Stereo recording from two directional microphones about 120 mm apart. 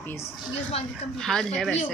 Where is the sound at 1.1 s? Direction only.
5° left (ahead or behind).